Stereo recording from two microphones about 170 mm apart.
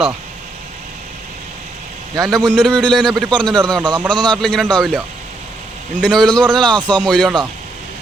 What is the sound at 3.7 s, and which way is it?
Speech, 25° right (ahead or behind).